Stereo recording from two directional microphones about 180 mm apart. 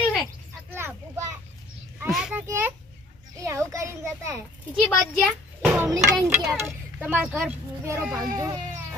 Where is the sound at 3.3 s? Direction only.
15° right (ahead or behind).